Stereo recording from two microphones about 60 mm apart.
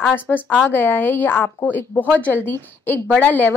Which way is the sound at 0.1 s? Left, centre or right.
Left.